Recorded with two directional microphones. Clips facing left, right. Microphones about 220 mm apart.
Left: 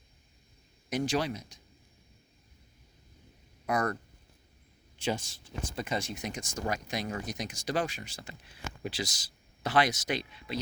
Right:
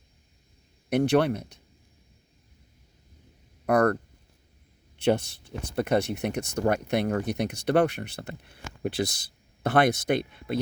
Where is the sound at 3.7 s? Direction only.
60° right (ahead or behind).